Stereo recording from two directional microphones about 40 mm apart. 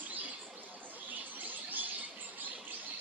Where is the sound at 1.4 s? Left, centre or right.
Right.